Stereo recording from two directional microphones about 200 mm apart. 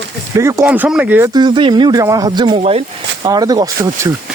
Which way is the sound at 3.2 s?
20° right (ahead or behind).